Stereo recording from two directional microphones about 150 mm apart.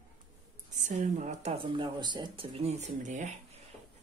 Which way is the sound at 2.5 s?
45° right (ahead or behind).